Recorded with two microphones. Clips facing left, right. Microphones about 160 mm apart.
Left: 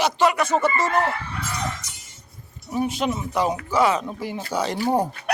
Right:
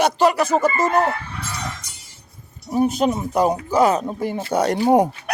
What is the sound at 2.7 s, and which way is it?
A man's voice, 40° right (ahead or behind).